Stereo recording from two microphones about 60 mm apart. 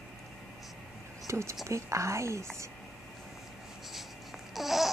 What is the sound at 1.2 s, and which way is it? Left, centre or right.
A woman's voice, right.